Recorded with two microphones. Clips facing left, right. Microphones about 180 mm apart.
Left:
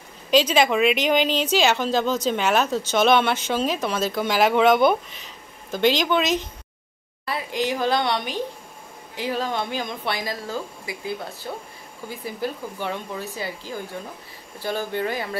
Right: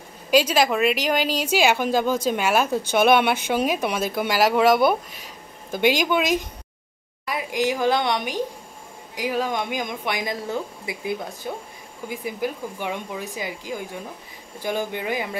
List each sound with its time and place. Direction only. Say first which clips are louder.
0.3 s speech: even; 5° right (ahead or behind)